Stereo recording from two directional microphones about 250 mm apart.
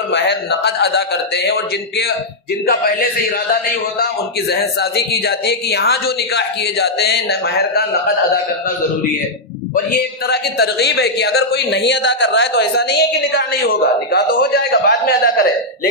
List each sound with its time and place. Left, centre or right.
0.1 s speech: left
10.2 s speech: left